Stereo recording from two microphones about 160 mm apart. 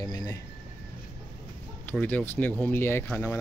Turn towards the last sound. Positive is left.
turn(degrees=15)  # may be behind; listen again after turning